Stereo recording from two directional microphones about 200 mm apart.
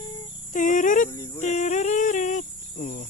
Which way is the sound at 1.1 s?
15° left (ahead or behind).